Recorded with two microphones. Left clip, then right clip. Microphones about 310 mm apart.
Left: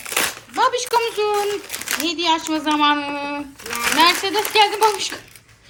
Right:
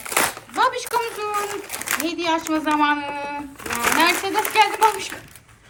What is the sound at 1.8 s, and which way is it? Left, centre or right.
A child's voice, centre.